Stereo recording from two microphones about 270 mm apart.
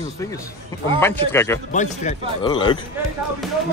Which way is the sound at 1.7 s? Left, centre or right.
Left.